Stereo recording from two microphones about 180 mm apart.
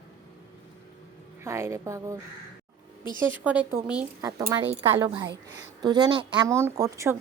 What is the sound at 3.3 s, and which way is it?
A woman's voice, 10° right (ahead or behind).